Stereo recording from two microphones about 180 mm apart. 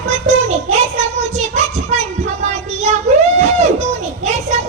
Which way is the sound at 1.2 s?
40° right (ahead or behind).